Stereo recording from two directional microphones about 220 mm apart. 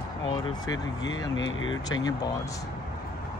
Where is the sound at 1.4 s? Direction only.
60° left (ahead or behind).